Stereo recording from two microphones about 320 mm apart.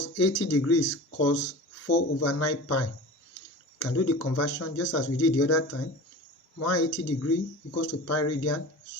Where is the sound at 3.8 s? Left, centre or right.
Left.